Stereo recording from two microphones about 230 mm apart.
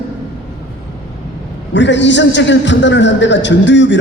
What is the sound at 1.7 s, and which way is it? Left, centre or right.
A man's voice, left.